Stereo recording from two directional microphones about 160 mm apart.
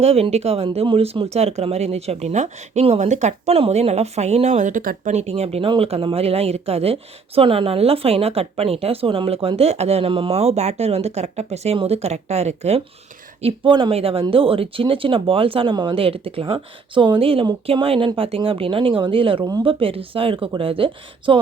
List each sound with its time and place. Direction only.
0.0 s speech: 40° right (ahead or behind); by 5.1 s 60° right (ahead or behind)
5.1 s speech: 40° right (ahead or behind)
13.4 s speech: 30° right (ahead or behind)